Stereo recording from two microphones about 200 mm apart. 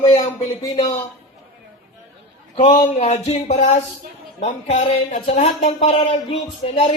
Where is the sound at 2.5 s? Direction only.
40° left (ahead or behind).